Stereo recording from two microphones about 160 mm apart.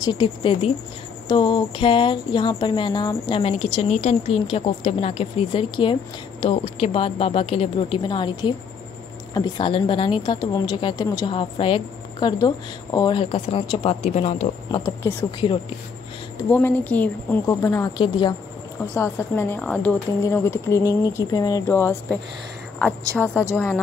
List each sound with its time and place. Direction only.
0.0 s speech: 30° left (ahead or behind)
14.8 s a woman's voice: 15° left (ahead or behind)
16.3 s a woman's voice: 10° left (ahead or behind)
17.9 s speech: 30° left (ahead or behind)
18.9 s a woman's voice: 15° left (ahead or behind)
23.5 s a woman's voice: 10° left (ahead or behind)